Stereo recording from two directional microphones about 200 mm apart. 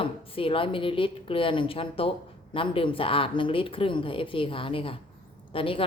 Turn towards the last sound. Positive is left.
turn(degrees=25)  # may be behind; listen again after turning